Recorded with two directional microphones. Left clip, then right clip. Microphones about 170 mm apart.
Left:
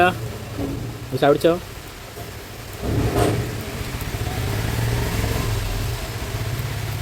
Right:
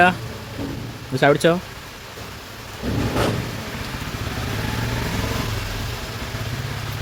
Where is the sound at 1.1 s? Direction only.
30° right (ahead or behind).